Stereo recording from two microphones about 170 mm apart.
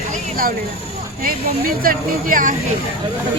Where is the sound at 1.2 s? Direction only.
55° right (ahead or behind).